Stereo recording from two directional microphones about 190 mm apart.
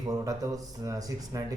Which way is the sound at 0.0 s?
20° right (ahead or behind).